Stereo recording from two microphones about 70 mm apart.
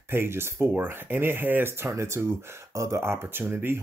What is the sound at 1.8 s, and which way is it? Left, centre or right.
Speech, right.